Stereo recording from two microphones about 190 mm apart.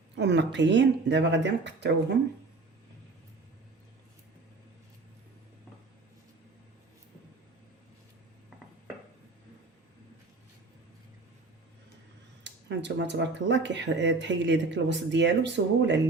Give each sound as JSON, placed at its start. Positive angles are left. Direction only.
{"t": 0.2, "sound": "speech", "side_deg": -65}
{"t": 12.4, "sound": "speech", "side_deg": -70}